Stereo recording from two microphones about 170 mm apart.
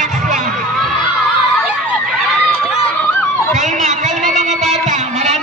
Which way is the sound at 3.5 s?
45° right (ahead or behind).